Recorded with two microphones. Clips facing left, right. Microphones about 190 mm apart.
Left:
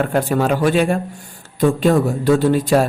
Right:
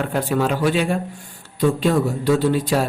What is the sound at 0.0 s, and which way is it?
A man's voice, 45° left (ahead or behind).